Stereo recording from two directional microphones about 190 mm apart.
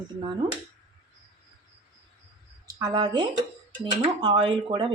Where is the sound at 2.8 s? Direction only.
20° right (ahead or behind).